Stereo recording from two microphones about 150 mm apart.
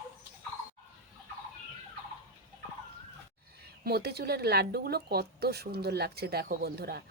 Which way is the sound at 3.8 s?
90° right.